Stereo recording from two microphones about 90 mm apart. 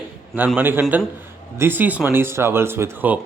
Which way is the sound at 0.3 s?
20° right (ahead or behind).